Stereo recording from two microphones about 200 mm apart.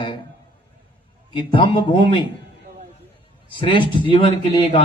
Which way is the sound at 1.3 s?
25° left (ahead or behind).